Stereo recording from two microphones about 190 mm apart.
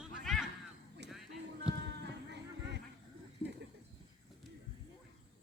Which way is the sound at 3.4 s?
25° left (ahead or behind).